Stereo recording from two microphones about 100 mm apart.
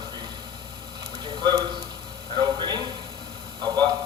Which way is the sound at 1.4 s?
45° right (ahead or behind).